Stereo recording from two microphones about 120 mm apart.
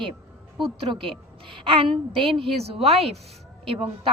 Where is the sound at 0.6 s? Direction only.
45° right (ahead or behind).